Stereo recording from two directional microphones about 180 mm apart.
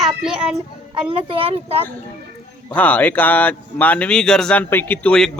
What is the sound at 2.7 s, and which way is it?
A child's voice, 10° left (ahead or behind).